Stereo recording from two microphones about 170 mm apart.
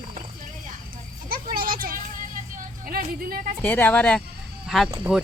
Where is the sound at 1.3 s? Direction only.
60° right (ahead or behind).